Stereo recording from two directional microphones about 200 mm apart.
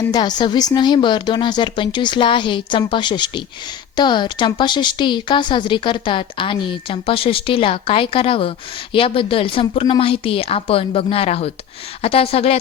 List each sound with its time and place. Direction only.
0.1 s a woman's voice: 20° left (ahead or behind)